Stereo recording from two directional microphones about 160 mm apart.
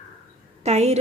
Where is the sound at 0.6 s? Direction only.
45° right (ahead or behind).